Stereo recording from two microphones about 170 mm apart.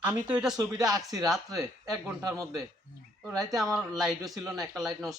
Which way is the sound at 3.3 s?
Centre (ahead or behind).